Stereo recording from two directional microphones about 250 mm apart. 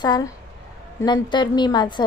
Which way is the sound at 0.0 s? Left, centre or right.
Centre.